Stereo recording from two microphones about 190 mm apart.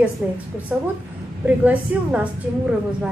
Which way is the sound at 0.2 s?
10° right (ahead or behind).